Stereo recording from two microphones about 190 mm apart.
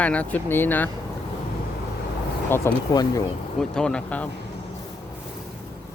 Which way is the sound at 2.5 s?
15° left (ahead or behind).